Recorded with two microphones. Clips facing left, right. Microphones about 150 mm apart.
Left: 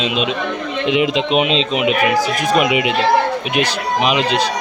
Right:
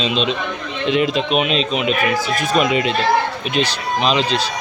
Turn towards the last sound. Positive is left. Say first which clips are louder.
# left 2 dB
turn(degrees=15)  # may be behind; listen again after turning